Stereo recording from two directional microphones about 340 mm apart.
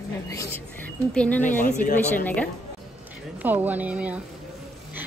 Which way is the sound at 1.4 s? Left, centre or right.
Left.